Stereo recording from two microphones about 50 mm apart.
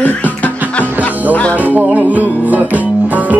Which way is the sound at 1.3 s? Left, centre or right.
Left.